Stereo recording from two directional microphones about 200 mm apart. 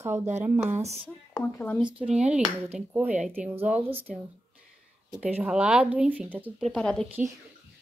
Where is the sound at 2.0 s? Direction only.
5° right (ahead or behind).